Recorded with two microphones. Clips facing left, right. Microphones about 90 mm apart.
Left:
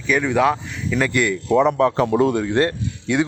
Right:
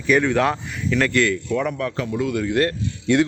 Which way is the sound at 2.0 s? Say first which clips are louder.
Left 7 dB; 50° left (ahead or behind).